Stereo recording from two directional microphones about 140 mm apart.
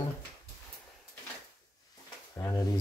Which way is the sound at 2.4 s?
25° left (ahead or behind).